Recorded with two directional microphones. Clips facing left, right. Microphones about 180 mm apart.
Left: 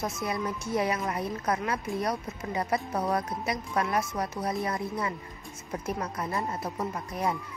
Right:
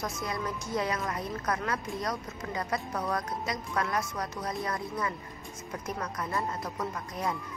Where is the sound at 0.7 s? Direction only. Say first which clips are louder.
Left 3 dB; 25° left (ahead or behind).